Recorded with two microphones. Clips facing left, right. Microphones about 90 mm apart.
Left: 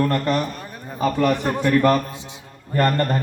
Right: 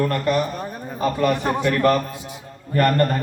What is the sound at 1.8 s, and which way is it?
A man's voice, 20° left (ahead or behind).